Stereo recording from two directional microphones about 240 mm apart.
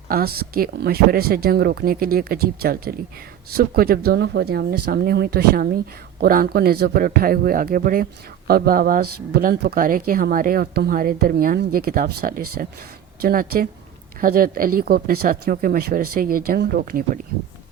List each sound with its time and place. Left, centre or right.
0.1 s speech: right